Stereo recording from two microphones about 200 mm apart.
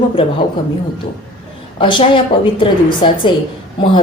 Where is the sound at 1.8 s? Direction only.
25° left (ahead or behind).